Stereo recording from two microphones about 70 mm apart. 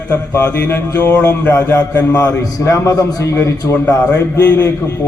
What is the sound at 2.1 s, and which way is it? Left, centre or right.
A man's voice, left.